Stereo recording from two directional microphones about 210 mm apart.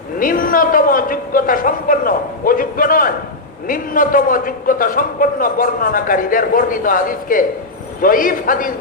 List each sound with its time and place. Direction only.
0.2 s a man's voice: 40° left (ahead or behind)